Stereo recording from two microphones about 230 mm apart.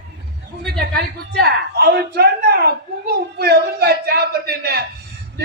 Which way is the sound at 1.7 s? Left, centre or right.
Right.